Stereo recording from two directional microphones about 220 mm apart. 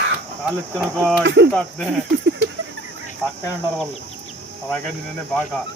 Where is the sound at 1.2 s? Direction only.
55° right (ahead or behind).